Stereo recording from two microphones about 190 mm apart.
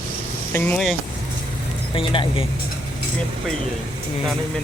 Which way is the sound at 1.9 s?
25° left (ahead or behind).